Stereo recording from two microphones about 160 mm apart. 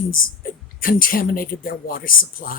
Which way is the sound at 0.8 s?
60° left (ahead or behind).